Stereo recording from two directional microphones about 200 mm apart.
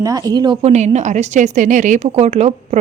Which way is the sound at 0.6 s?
35° right (ahead or behind).